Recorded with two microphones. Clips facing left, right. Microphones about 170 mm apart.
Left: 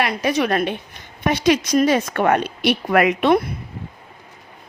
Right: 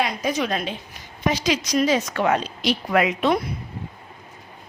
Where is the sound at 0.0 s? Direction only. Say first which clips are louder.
Left 4 dB; 70° left (ahead or behind).